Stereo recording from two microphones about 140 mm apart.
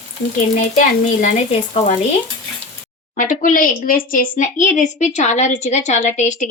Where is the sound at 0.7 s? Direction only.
65° left (ahead or behind).